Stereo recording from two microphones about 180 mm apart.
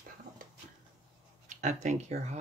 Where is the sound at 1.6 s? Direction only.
40° right (ahead or behind).